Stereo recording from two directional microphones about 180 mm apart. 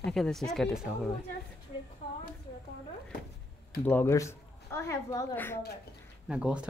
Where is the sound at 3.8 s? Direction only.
10° left (ahead or behind).